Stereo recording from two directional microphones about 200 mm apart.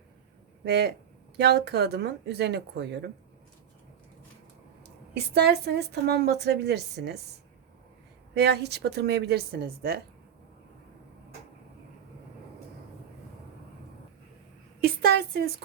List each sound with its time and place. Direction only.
0.6 s a woman's voice: 55° right (ahead or behind)
5.1 s a woman's voice: 55° right (ahead or behind)
8.4 s a woman's voice: 55° right (ahead or behind)
14.8 s a sound: 50° right (ahead or behind)